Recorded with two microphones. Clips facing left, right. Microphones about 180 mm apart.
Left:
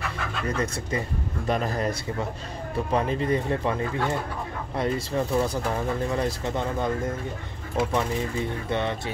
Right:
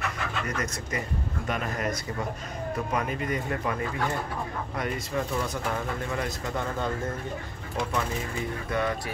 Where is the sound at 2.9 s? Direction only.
30° left (ahead or behind).